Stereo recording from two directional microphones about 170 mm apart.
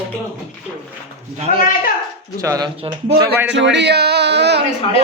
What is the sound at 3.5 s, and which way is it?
Speech, 90° right.